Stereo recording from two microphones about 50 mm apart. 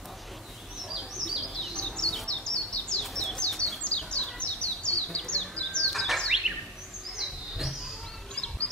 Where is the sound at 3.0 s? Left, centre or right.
Centre.